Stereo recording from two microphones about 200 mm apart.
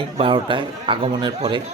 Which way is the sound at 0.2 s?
25° right (ahead or behind).